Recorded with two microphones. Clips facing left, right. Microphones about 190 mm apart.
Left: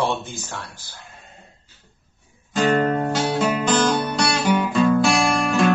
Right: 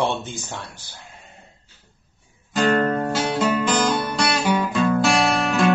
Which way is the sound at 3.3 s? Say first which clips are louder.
Even; centre (ahead or behind).